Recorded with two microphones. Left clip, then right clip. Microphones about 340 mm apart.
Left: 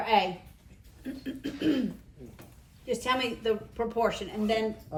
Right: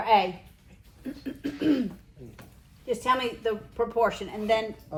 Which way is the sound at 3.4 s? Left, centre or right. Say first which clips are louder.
Right 1 dB; centre.